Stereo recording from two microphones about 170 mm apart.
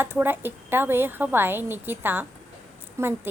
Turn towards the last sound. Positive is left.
turn(degrees=-15)  # may be behind; listen again after turning